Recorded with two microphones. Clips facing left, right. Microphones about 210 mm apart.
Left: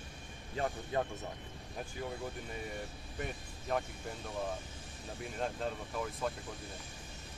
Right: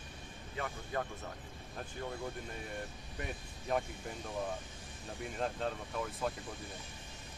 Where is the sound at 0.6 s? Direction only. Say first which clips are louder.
Left 4 dB; 30° left (ahead or behind).